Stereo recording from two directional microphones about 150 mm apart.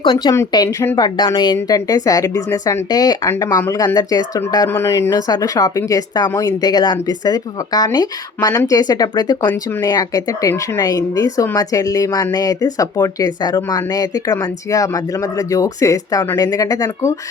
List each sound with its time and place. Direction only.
0.0 s speech: 35° left (ahead or behind)
0.3 s speech: 25° left (ahead or behind)